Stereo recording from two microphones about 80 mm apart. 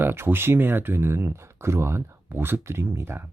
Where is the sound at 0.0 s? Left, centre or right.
Right.